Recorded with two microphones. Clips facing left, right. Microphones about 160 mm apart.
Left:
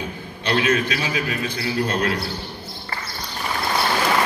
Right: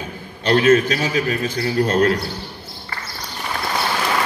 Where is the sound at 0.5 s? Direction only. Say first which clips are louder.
Right 6 dB; 45° right (ahead or behind).